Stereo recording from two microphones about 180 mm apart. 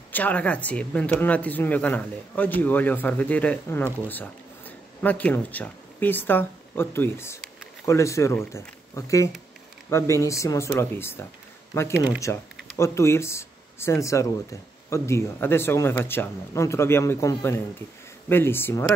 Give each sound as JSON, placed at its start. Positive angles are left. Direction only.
{"t": 0.1, "sound": "speech", "side_deg": 10}